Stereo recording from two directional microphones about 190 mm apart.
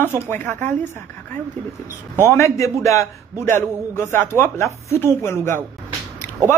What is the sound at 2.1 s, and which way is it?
A man's voice, 15° left (ahead or behind).